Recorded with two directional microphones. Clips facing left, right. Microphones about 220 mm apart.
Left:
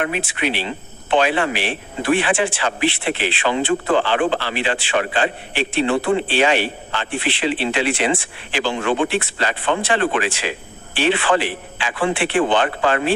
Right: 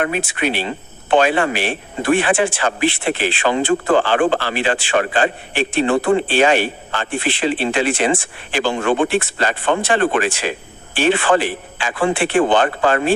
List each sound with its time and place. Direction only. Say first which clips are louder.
0.0 s speech: right 2 dB; 45° right (ahead or behind)